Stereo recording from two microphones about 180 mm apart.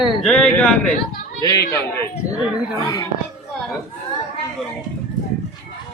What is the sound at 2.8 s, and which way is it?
Speech, 20° left (ahead or behind).